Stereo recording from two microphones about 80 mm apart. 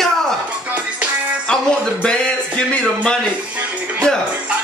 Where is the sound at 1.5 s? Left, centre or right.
Centre.